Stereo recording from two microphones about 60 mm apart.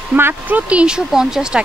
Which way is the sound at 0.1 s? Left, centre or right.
Right.